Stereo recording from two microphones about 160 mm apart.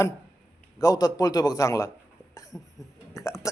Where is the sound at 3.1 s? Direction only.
20° left (ahead or behind).